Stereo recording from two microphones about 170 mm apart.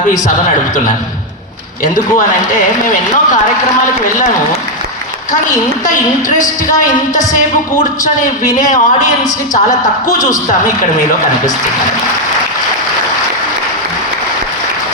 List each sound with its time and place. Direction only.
5.8 s speech: 50° left (ahead or behind)
8.5 s speech: 50° left (ahead or behind)